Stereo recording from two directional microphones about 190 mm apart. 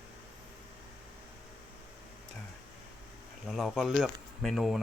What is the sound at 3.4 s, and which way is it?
Speech, centre (ahead or behind).